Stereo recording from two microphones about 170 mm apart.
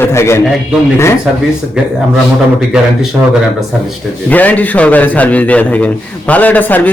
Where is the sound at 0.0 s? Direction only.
15° left (ahead or behind).